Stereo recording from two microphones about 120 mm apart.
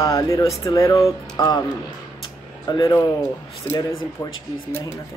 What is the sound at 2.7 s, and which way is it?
Speech, 30° left (ahead or behind).